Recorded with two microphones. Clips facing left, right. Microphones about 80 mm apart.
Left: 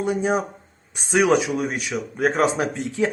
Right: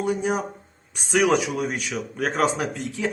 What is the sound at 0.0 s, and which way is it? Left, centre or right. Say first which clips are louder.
Speech: left 2 dB; left.